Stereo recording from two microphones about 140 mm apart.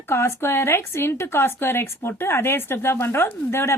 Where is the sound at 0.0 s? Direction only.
20° left (ahead or behind).